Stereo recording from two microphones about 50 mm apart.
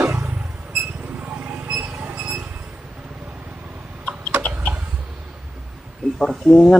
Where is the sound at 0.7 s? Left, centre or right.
Right.